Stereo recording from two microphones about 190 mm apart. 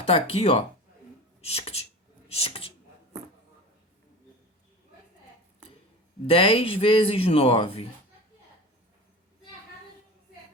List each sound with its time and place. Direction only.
0.1 s speech: 30° left (ahead or behind)
6.2 s speech: 30° left (ahead or behind)